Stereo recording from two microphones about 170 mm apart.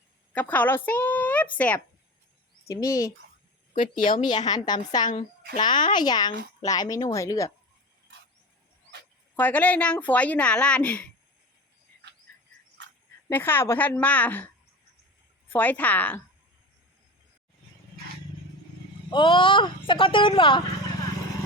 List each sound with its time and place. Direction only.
0.3 s a woman's voice: 10° left (ahead or behind)
2.6 s speech: 20° left (ahead or behind)
3.8 s speech: 30° left (ahead or behind)
9.3 s a woman's voice: 10° left (ahead or behind)
13.2 s a woman's voice: 10° left (ahead or behind)
19.1 s speech: 30° left (ahead or behind)